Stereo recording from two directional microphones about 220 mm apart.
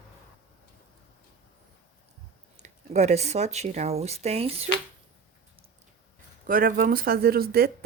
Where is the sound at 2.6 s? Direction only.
30° right (ahead or behind).